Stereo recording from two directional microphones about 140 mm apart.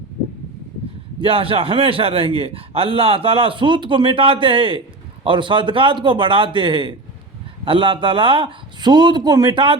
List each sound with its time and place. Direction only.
1.2 s a man's voice: 40° right (ahead or behind)